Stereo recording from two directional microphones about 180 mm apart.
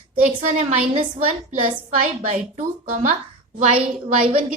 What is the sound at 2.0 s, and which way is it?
A woman's voice, 45° right (ahead or behind).